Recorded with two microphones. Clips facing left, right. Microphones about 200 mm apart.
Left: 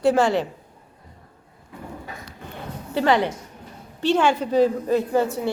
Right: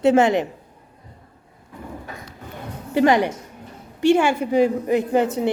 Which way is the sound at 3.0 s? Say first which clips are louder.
Right 3 dB; 15° right (ahead or behind).